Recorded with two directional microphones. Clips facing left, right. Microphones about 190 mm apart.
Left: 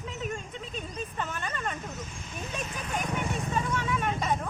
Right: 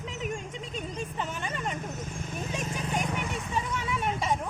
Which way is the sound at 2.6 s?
35° right (ahead or behind).